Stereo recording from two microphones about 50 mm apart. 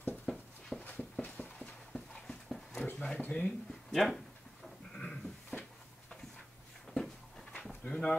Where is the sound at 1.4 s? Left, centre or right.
Left.